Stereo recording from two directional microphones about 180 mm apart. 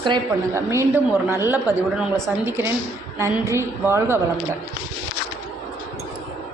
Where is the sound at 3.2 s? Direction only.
15° right (ahead or behind).